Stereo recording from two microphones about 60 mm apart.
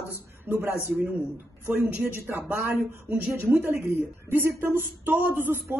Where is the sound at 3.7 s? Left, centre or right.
Right.